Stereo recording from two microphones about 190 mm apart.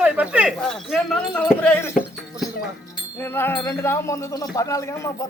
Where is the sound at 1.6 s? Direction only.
10° left (ahead or behind).